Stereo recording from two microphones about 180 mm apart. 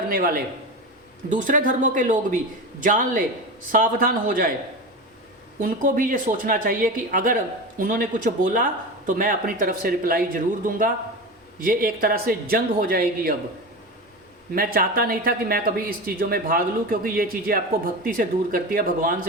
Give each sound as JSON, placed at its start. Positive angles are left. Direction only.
{"t": 0.1, "sound": "speech", "side_deg": -55}
{"t": 5.5, "sound": "speech", "side_deg": -50}
{"t": 14.5, "sound": "speech", "side_deg": -55}